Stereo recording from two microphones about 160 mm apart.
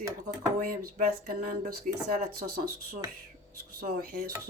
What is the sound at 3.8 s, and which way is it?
Speech, 65° right (ahead or behind).